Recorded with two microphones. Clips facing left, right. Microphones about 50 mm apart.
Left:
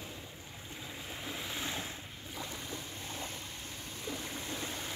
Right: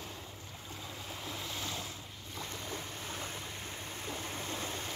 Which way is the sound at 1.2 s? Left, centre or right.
Centre.